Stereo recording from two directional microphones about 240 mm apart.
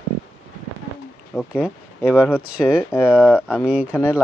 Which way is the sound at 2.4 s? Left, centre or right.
Centre.